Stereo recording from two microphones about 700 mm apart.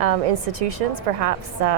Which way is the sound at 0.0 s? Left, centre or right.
Right.